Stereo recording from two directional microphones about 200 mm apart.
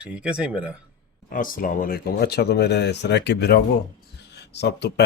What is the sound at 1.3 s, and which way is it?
Speech, 45° left (ahead or behind).